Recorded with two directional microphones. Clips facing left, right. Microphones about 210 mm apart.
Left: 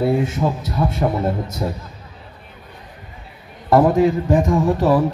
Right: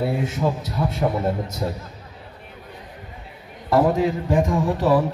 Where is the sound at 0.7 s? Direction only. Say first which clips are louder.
Left 4 dB; 55° left (ahead or behind).